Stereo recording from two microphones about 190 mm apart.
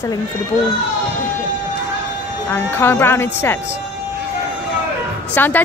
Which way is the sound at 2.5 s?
10° left (ahead or behind).